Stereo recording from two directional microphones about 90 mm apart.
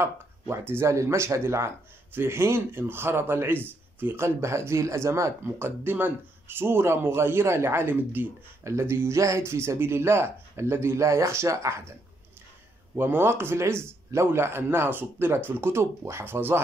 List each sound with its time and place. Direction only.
0.0 s a man's voice: 30° right (ahead or behind)
12.9 s a man's voice: 25° right (ahead or behind)